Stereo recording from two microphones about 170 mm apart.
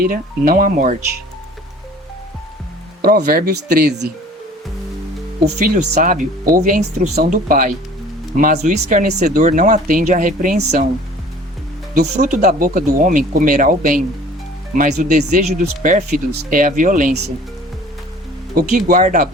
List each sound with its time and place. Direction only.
0.0 s speech: 55° right (ahead or behind)
3.0 s speech: 65° right (ahead or behind)
5.6 s speech: 50° right (ahead or behind)
12.1 s speech: 45° right (ahead or behind)
18.5 s speech: 50° right (ahead or behind)